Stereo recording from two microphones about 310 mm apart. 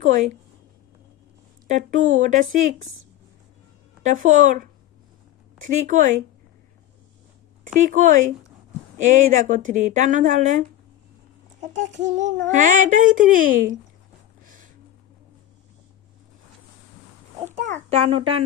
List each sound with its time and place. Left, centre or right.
0.0 s speech: right
1.7 s speech: right
4.0 s speech: right
5.9 s speech: right
7.6 s speech: right
11.7 s child singing: right
12.0 s speech: right
14.4 s a sound: right
17.4 s a child's voice: right